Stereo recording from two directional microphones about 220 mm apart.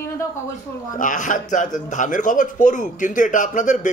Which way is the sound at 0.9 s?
35° left (ahead or behind).